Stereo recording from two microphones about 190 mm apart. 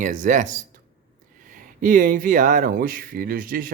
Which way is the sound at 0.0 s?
45° right (ahead or behind).